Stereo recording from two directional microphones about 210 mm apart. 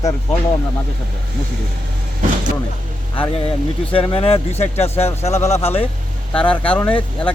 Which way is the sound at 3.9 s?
25° left (ahead or behind).